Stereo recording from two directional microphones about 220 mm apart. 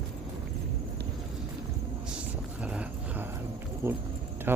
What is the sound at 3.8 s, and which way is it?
Speech, 10° right (ahead or behind).